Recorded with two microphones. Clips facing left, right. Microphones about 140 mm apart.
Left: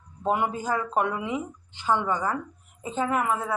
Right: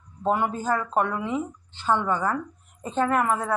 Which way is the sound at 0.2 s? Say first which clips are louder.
Right 1 dB; 15° left (ahead or behind).